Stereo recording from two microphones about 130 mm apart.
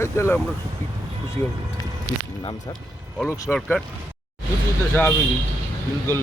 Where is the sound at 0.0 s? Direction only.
20° left (ahead or behind).